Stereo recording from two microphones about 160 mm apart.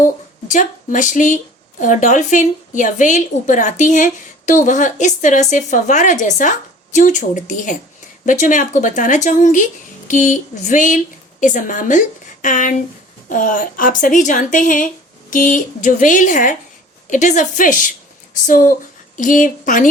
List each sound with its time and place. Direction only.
0.0 s a woman's voice: 50° left (ahead or behind)